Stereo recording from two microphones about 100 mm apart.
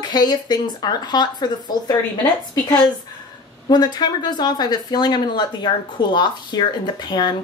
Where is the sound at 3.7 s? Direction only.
45° left (ahead or behind).